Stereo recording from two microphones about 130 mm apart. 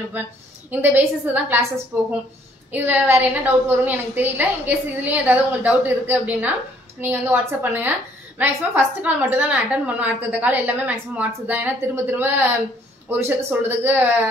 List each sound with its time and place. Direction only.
0.7 s a woman's voice: 15° right (ahead or behind)
2.7 s a woman's voice: 15° right (ahead or behind)